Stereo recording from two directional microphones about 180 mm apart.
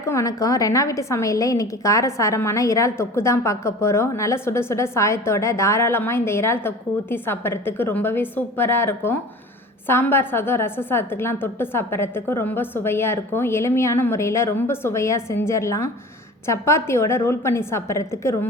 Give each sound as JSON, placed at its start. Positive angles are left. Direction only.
{"t": 0.0, "sound": "a woman's voice", "side_deg": 15}